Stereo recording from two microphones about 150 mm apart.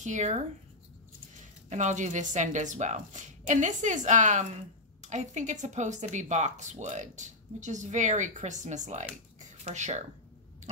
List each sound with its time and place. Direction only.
0.0 s speech: 55° right (ahead or behind)
1.7 s speech: 55° right (ahead or behind)